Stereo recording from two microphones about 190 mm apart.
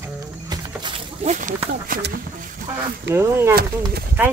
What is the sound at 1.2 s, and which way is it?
Speech, 40° right (ahead or behind).